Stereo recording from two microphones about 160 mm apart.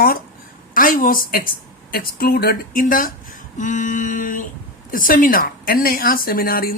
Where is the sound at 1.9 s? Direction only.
75° left (ahead or behind).